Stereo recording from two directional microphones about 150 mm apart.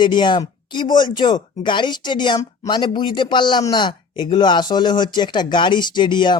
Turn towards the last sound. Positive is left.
turn(degrees=30)  # may be behind; listen again after turning